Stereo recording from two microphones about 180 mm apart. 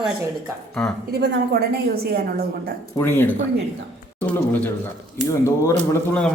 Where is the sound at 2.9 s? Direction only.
15° left (ahead or behind).